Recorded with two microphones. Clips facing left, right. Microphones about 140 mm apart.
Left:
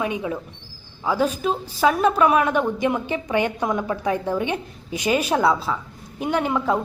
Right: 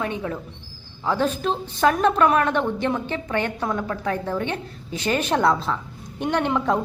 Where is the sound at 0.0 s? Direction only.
10° left (ahead or behind).